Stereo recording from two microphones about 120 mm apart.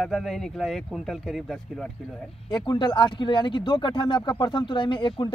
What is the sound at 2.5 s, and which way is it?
Speech, 40° left (ahead or behind).